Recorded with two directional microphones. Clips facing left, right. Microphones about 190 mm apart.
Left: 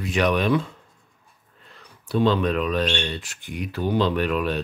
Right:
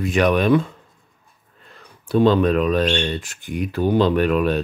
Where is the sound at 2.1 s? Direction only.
45° right (ahead or behind).